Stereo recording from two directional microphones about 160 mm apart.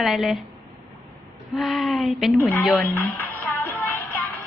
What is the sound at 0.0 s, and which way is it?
Speech, centre (ahead or behind).